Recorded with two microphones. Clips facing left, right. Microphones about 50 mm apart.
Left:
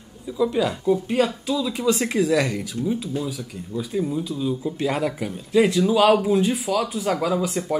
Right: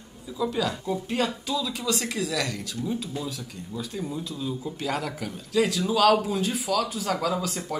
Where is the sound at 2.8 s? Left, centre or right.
Centre.